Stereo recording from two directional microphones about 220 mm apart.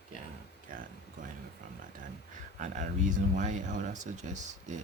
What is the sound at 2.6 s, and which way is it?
Speech, 35° right (ahead or behind).